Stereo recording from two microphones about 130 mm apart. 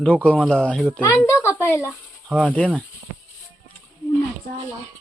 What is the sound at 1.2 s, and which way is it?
Speech, 20° left (ahead or behind).